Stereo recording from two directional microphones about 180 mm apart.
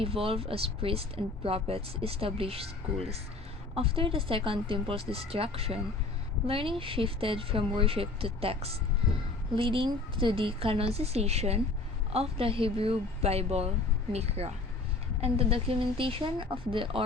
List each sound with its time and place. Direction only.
0.0 s speech: 30° right (ahead or behind)